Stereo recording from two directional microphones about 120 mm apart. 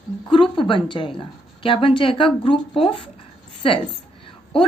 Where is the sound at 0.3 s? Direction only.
45° left (ahead or behind).